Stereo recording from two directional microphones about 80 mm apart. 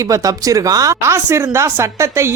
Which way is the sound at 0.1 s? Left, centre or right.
Right.